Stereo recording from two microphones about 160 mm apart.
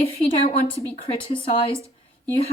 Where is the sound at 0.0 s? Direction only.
35° left (ahead or behind).